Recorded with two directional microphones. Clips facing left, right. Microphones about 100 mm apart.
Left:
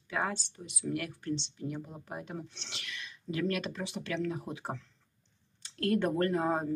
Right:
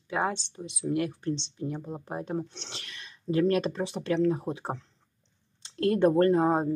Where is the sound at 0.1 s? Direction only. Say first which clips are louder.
Right 5 dB; 25° right (ahead or behind).